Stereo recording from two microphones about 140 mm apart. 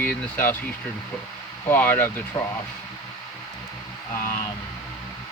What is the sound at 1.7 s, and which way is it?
Speech, 15° left (ahead or behind).